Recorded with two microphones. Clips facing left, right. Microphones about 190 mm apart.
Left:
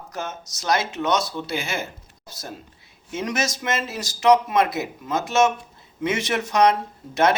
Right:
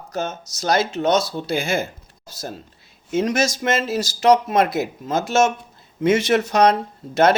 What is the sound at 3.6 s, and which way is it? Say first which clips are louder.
Speech: right 5 dB; 45° right (ahead or behind).